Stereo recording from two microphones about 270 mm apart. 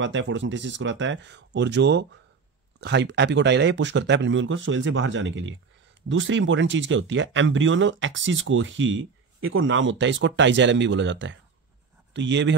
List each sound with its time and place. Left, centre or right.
0.0 s speech: right